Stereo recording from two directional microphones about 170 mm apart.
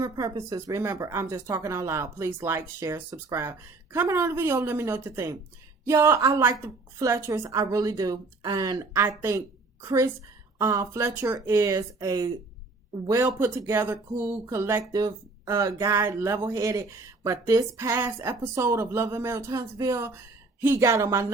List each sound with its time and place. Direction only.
0.0 s a woman's voice: 20° right (ahead or behind)